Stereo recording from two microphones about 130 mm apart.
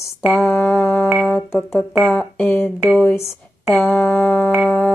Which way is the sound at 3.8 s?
15° left (ahead or behind).